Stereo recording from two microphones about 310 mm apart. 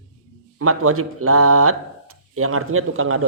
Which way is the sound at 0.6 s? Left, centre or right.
Right.